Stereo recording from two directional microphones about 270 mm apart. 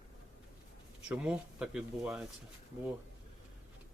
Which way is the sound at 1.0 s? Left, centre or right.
Centre.